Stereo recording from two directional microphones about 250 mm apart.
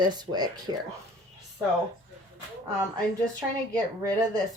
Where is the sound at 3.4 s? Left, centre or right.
Centre.